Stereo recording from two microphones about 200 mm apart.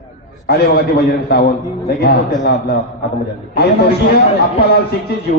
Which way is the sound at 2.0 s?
55° left (ahead or behind).